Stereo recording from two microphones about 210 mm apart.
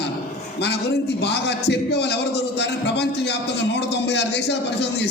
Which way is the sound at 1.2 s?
55° left (ahead or behind).